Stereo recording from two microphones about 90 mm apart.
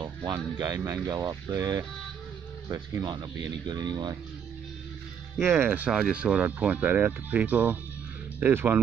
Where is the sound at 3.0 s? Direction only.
55° right (ahead or behind).